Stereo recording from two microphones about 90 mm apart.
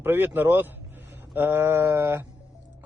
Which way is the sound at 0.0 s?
25° right (ahead or behind).